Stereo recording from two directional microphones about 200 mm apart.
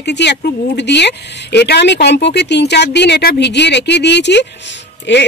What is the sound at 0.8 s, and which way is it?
Speech, 60° left (ahead or behind).